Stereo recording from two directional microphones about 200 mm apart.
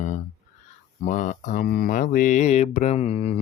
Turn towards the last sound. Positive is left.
turn(degrees=30)  # may be behind; listen again after turning